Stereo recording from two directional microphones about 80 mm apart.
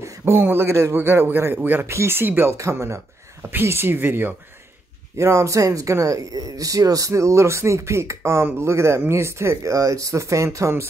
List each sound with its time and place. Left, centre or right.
0.2 s speech: right
5.1 s speech: right